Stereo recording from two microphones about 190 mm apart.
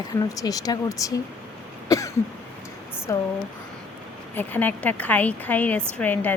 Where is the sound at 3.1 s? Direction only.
15° left (ahead or behind).